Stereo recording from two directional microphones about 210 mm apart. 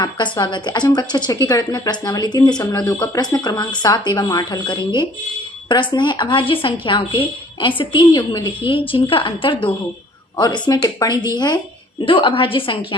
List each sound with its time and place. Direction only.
0.0 s a woman's voice: 20° left (ahead or behind)